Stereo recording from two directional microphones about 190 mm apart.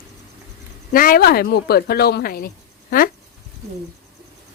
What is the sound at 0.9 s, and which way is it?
Speech, 50° left (ahead or behind).